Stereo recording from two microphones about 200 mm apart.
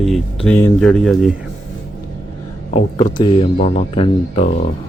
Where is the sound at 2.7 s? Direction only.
20° left (ahead or behind).